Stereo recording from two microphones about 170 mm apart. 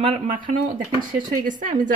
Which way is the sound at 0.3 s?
50° right (ahead or behind).